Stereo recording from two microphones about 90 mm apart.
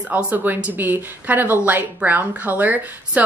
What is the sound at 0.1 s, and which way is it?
Speech, 20° right (ahead or behind).